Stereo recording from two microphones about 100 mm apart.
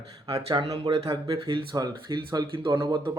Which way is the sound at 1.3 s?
60° right (ahead or behind).